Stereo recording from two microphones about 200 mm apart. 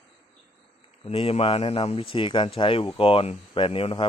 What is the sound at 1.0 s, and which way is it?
Speech, 30° left (ahead or behind).